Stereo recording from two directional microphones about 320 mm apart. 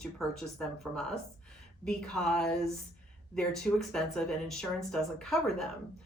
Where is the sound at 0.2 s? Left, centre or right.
Centre.